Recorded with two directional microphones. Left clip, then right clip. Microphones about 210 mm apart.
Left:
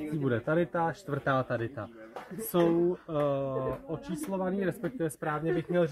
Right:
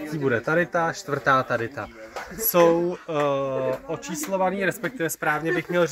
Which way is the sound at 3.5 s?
15° right (ahead or behind).